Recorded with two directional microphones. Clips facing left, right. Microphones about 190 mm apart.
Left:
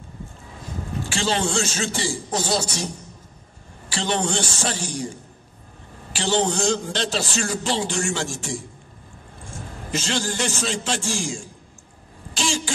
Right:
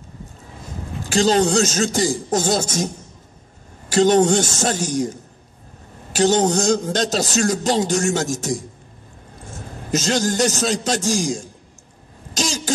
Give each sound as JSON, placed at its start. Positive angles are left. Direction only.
{"t": 1.0, "sound": "a man's voice", "side_deg": -40}
{"t": 3.9, "sound": "a man's voice", "side_deg": -45}
{"t": 9.8, "sound": "a man's voice", "side_deg": -40}